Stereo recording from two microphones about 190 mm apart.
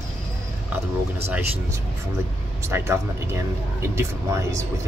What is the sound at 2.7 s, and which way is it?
Speech, 15° right (ahead or behind).